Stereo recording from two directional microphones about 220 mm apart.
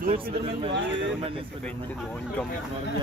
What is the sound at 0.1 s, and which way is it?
Speech, 25° right (ahead or behind).